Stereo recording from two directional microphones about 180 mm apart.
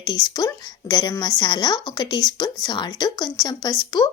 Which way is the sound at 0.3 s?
20° left (ahead or behind).